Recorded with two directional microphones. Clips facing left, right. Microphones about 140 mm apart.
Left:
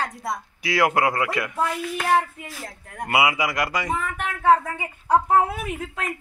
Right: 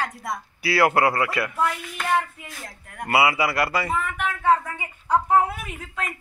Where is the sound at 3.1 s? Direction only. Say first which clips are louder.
Right 1 dB; 15° left (ahead or behind).